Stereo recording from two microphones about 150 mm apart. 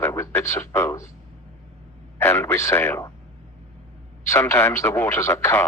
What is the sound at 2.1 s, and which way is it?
Speech, 20° left (ahead or behind).